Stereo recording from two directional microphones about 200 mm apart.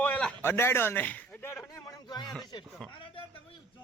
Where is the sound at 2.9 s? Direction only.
25° left (ahead or behind).